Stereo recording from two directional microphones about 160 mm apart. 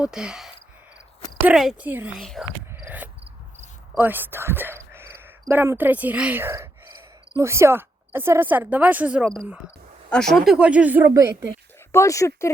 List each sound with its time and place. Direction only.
0.0 s speech: 5° right (ahead or behind)
2.1 s speech: centre (ahead or behind)
2.7 s cricket: 10° right (ahead or behind)
3.9 s speech: 10° right (ahead or behind)
10.1 s speech: 5° left (ahead or behind); by 11.4 s 15° right (ahead or behind)
11.9 s speech: 20° left (ahead or behind)